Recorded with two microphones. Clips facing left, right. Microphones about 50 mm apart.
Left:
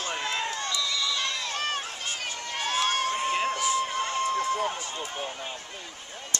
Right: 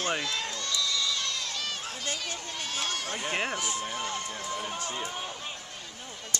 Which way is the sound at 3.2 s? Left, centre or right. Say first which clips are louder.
Even; right.